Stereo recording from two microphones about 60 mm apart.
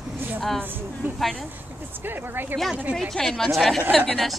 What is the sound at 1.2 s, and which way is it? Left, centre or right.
Speech, centre.